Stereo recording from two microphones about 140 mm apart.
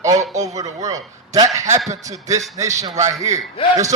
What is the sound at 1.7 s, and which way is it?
Speech, 55° right (ahead or behind).